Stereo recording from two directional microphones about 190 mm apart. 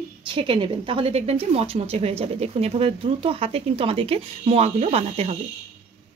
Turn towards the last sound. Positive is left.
turn(degrees=-35)  # may be behind; listen again after turning